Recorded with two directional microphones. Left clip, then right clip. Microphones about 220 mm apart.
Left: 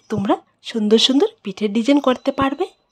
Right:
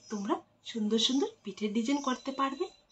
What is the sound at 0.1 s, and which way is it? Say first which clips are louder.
Speech: left 14 dB; 55° left (ahead or behind).